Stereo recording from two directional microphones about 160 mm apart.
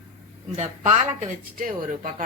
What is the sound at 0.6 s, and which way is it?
Speech, 50° right (ahead or behind).